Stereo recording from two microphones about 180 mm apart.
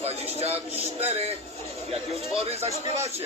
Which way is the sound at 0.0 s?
35° right (ahead or behind).